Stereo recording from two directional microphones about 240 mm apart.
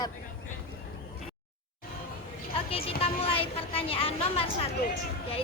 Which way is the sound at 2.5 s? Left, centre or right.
Left.